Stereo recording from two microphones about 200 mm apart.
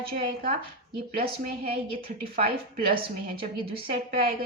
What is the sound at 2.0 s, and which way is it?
Speech, 50° right (ahead or behind).